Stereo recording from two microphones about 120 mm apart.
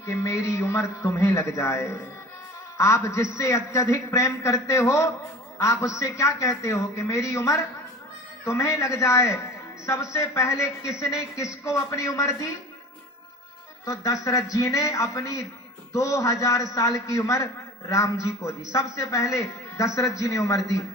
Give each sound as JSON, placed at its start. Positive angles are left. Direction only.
{"t": 0.0, "sound": "a man's voice", "side_deg": 25}
{"t": 13.8, "sound": "a man's voice", "side_deg": 30}